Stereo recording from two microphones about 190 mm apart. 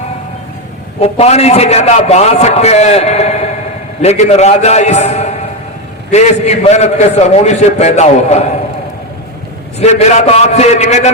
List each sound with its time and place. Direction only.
1.0 s a man's voice: 35° left (ahead or behind)
9.8 s a man's voice: 35° left (ahead or behind)